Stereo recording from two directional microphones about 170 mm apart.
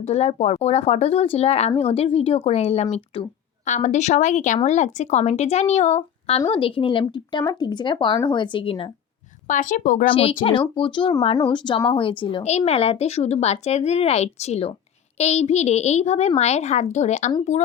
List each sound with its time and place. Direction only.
0.0 s speech: 40° left (ahead or behind)
9.5 s speech: 50° left (ahead or behind)
10.1 s speech: 35° left (ahead or behind)